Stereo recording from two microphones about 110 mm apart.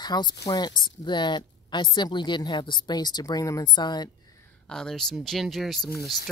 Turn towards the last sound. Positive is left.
turn(degrees=0)  # may be behind; listen again after turning